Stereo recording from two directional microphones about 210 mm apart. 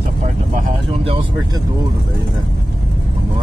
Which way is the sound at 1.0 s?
25° right (ahead or behind).